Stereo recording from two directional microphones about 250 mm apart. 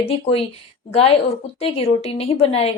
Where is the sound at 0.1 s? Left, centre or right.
Left.